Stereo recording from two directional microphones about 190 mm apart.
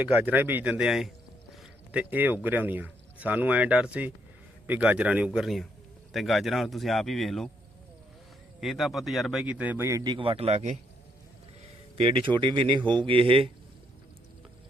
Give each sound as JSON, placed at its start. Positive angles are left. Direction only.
{"t": 0.0, "sound": "speech", "side_deg": -10}
{"t": 8.6, "sound": "speech", "side_deg": 0}
{"t": 11.9, "sound": "speech", "side_deg": -30}